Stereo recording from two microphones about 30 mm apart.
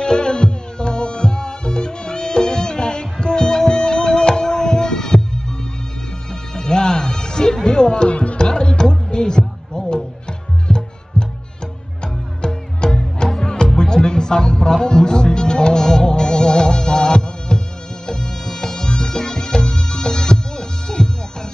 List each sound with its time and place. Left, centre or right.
0.0 s music: left
6.5 s music: left
8.1 s music: left
8.4 s music: left
12.4 s music: left